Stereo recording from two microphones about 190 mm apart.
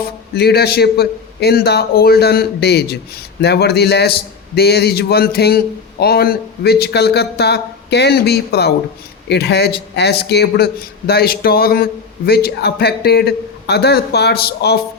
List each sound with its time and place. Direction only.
0.0 s a man's voice: 60° left (ahead or behind)